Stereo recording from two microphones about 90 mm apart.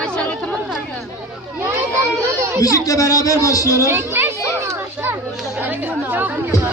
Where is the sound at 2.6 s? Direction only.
40° left (ahead or behind).